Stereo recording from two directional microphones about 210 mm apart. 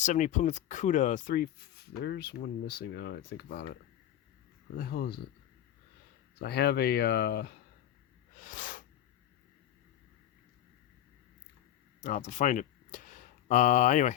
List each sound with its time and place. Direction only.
0.0 s speech: 35° left (ahead or behind)
2.0 s speech: 50° left (ahead or behind)
4.8 s speech: 45° left (ahead or behind)
6.4 s speech: 50° left (ahead or behind)
8.4 s a sound: 40° left (ahead or behind)
11.9 s speech: 35° left (ahead or behind)